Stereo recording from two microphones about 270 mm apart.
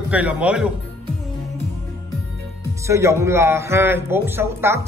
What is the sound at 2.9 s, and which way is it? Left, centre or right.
A man's voice, centre.